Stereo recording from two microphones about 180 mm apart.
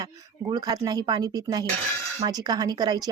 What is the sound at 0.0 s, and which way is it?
A woman's voice, 25° right (ahead or behind).